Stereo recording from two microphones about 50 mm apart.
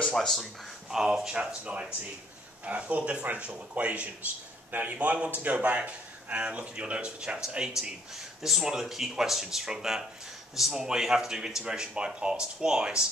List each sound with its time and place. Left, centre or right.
0.1 s speech: centre
0.8 s speech: centre
1.3 s a man's voice: right